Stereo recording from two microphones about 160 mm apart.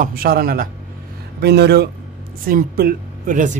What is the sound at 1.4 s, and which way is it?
Speech, 90° right.